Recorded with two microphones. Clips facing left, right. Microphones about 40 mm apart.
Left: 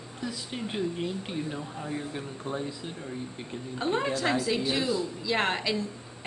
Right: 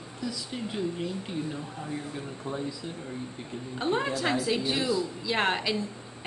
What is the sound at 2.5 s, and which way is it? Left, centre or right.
Speech, left.